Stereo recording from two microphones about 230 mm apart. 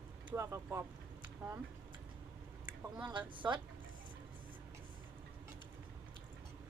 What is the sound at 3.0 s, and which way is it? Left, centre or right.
Speech, centre.